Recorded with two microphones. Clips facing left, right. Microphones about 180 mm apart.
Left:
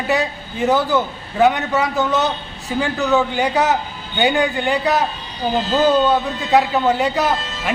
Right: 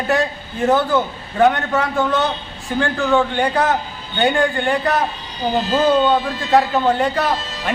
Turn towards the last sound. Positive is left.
turn(degrees=5)  # may be behind; listen again after turning